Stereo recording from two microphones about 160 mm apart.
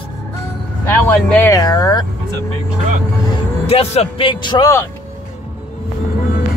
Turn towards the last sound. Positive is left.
turn(degrees=20)  # may be behind; listen again after turning